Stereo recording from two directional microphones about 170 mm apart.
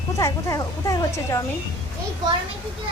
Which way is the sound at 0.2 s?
20° left (ahead or behind).